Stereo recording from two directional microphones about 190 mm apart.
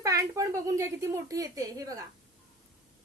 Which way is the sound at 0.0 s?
15° right (ahead or behind).